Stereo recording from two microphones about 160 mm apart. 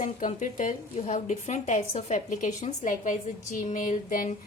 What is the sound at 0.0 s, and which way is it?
A woman's voice, 50° left (ahead or behind).